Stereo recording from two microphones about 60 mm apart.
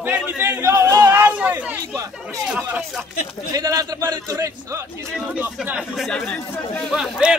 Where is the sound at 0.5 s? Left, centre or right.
Right.